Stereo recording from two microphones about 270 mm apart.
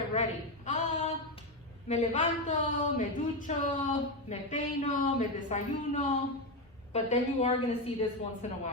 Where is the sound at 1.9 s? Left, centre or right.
Left.